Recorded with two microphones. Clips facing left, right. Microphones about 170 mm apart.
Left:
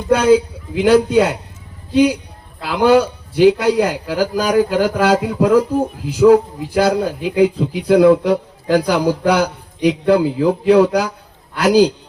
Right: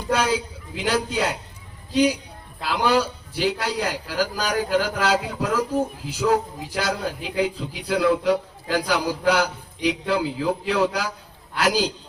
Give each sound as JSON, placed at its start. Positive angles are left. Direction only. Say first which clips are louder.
{"t": 0.1, "sound": "a man's voice", "louder": "left 11 dB", "side_deg": 55}